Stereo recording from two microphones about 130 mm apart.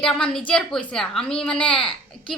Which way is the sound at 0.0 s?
5° left (ahead or behind).